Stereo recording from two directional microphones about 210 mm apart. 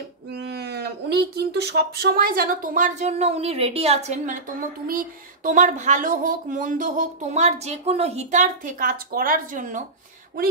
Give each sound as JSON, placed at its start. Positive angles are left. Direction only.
{"t": 0.3, "sound": "speech", "side_deg": -50}